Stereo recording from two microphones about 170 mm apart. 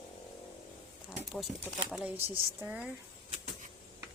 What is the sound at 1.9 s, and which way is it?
Speech, 5° right (ahead or behind).